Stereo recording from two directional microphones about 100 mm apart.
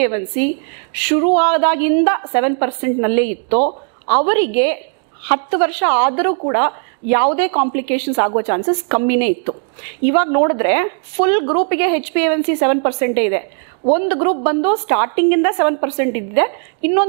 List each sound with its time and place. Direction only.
0.0 s a woman's voice: 15° right (ahead or behind)